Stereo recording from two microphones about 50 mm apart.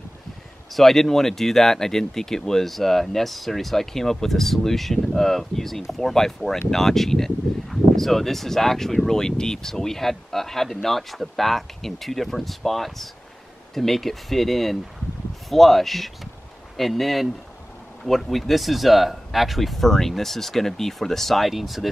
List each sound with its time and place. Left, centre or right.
0.7 s speech: centre